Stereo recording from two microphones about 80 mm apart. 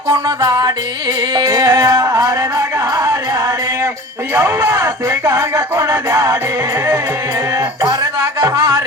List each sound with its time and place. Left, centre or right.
0.1 s music: right
4.4 s music: right
7.8 s music: right